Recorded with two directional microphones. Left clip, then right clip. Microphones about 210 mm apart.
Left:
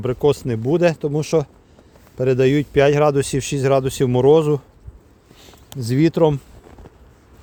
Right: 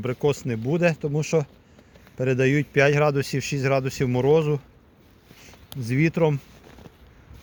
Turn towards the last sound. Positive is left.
turn(degrees=30)  # may be behind; listen again after turning